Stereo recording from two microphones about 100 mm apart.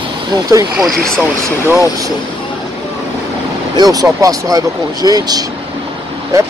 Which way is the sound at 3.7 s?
40° right (ahead or behind).